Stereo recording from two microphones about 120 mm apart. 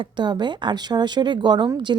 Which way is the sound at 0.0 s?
40° right (ahead or behind).